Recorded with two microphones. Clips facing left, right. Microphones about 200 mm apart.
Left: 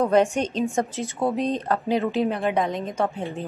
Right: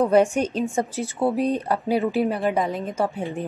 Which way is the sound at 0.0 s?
10° right (ahead or behind).